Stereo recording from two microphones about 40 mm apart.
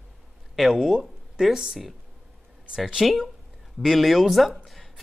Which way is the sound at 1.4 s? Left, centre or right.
Centre.